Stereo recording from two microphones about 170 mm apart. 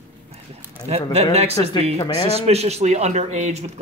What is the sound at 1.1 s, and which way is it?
Speech, 40° right (ahead or behind).